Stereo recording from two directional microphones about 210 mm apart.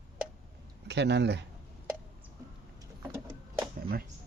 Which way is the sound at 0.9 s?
55° right (ahead or behind).